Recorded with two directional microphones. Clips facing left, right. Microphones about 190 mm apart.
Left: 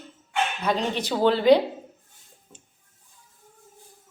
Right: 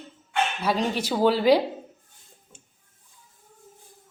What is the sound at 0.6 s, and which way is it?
Child singing, 10° right (ahead or behind).